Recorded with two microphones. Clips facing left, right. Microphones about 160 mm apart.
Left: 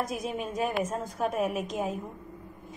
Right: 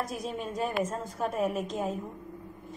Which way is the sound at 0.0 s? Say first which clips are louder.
Left 2 dB; 15° left (ahead or behind).